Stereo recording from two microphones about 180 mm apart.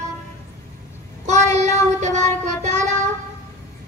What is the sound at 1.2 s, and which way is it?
Child singing, 40° right (ahead or behind).